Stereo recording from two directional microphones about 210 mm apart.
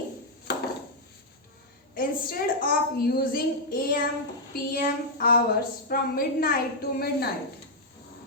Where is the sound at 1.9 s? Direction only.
45° left (ahead or behind).